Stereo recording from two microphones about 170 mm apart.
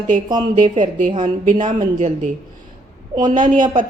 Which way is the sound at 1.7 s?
50° right (ahead or behind).